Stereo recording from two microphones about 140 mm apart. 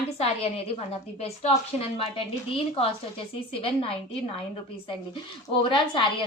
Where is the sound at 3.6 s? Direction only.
40° left (ahead or behind).